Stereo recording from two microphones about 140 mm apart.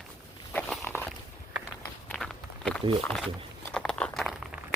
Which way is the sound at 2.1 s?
5° left (ahead or behind).